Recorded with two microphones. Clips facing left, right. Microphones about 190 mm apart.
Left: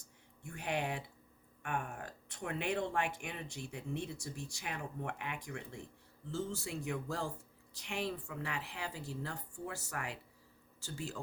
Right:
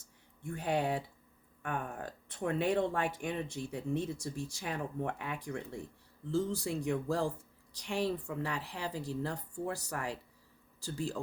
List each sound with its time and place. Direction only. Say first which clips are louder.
0.4 s speech: right 5 dB; 35° right (ahead or behind)